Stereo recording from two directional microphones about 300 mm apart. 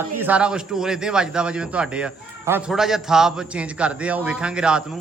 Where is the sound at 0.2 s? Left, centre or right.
Centre.